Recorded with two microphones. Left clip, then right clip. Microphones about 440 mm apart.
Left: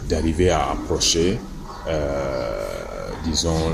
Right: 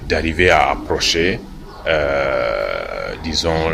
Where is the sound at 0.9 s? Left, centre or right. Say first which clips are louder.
Even; centre.